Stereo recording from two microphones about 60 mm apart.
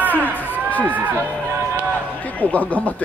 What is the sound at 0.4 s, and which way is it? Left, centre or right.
Music, left.